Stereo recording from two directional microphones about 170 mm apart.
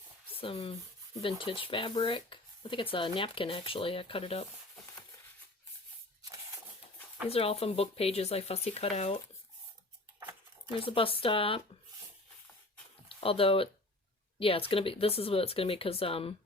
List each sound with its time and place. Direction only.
0.3 s speech: 35° left (ahead or behind)
7.3 s speech: 35° left (ahead or behind)
10.8 s speech: 30° left (ahead or behind)
13.1 s speech: 35° left (ahead or behind)